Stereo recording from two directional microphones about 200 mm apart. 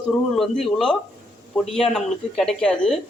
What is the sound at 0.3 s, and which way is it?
Speech, centre (ahead or behind).